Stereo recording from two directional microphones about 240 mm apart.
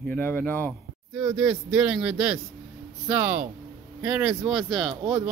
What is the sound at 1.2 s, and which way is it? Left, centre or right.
Speech, centre.